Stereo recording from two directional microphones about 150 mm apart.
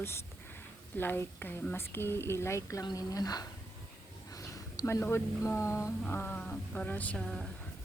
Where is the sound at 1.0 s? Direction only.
15° left (ahead or behind).